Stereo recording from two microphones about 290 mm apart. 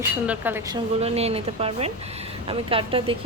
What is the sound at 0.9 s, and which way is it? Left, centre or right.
A woman's voice, right.